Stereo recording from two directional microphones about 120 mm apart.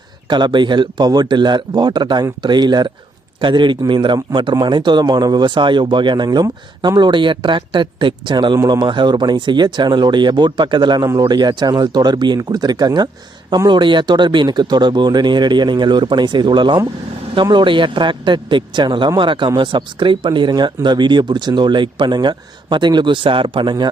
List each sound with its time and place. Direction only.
0.3 s speech: 40° right (ahead or behind)